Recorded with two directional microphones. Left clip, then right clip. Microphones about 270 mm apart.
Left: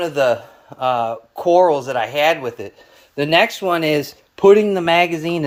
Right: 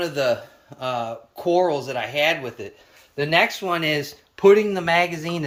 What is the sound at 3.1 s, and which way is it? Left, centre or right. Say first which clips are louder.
Speech: left 4 dB; left.